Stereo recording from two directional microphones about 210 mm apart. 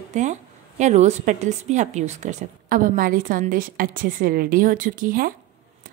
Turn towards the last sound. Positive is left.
turn(degrees=-40)  # may be behind; listen again after turning